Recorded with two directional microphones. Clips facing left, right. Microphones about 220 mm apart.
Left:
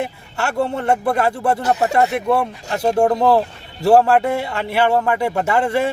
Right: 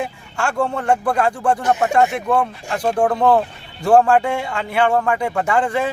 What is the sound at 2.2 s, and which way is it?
Speech, 10° left (ahead or behind).